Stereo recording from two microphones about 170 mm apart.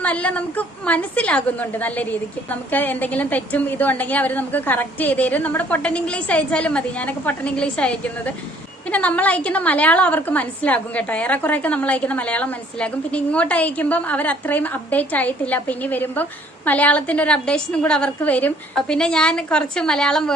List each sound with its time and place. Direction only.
0.0 s a woman's voice: 10° left (ahead or behind)